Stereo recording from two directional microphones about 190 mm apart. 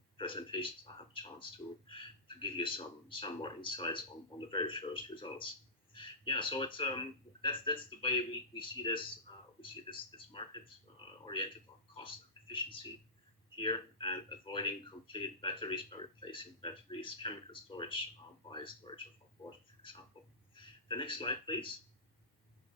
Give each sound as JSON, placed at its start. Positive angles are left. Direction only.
{"t": 0.2, "sound": "speech", "side_deg": 25}
{"t": 11.9, "sound": "speech", "side_deg": 25}